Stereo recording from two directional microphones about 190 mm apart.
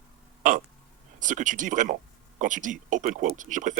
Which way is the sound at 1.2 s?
45° right (ahead or behind).